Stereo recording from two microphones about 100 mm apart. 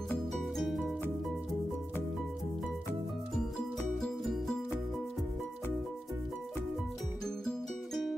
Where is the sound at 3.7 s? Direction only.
Centre (ahead or behind).